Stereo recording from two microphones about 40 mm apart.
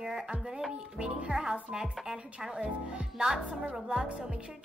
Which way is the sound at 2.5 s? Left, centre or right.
Right.